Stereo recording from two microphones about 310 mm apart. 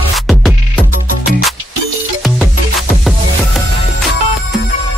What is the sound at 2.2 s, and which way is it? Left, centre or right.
Music, centre.